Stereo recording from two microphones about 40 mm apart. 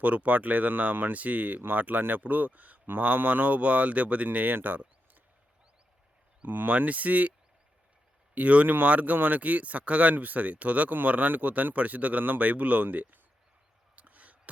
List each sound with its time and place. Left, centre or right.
0.0 s speech: right
6.4 s speech: right
8.4 s speech: right
8.6 s speech: right
8.9 s speech: right
13.9 s a sound: right